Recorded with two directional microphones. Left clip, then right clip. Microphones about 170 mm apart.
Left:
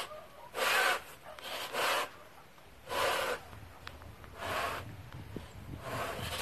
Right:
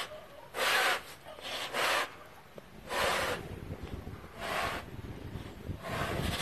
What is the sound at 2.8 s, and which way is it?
Gasp, centre (ahead or behind).